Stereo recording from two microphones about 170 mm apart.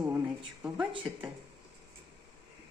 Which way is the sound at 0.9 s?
30° right (ahead or behind).